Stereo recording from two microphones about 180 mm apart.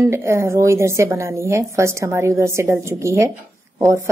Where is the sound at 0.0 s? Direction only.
15° right (ahead or behind).